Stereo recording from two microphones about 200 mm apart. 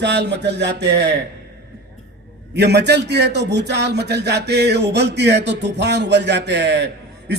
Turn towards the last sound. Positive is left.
turn(degrees=-55)  # may be behind; listen again after turning